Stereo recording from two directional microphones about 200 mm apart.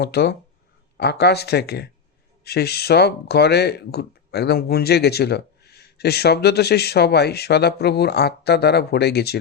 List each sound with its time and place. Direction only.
0.0 s speech: 55° left (ahead or behind)